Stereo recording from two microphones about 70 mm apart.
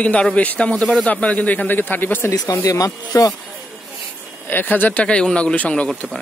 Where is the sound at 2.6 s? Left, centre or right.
Left.